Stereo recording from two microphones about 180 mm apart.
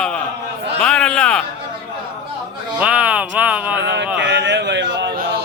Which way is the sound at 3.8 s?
75° right (ahead or behind).